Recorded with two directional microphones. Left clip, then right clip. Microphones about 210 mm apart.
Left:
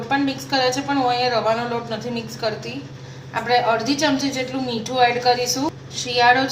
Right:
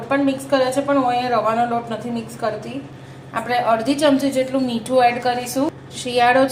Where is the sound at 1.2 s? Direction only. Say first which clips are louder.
Even; 20° right (ahead or behind).